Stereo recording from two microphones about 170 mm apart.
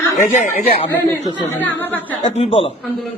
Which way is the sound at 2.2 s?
40° left (ahead or behind).